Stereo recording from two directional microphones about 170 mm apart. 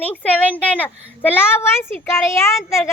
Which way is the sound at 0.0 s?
10° left (ahead or behind).